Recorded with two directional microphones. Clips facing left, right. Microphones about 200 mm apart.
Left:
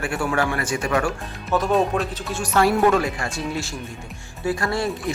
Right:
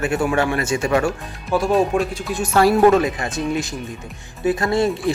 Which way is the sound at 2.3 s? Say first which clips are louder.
Right 4 dB; 25° right (ahead or behind).